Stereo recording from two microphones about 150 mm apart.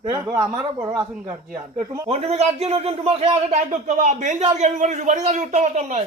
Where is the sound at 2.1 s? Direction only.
45° right (ahead or behind).